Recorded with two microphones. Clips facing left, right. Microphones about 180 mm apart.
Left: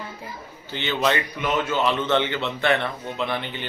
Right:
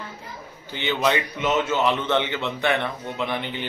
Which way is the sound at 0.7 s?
15° right (ahead or behind).